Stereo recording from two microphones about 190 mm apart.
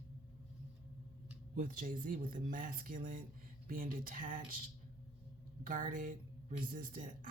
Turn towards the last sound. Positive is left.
turn(degrees=-45)  # may be behind; listen again after turning